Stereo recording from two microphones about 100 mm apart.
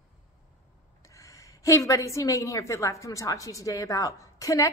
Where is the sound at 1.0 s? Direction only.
30° left (ahead or behind).